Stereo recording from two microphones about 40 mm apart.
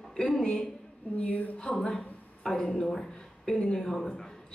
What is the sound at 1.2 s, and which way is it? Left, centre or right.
Speech, left.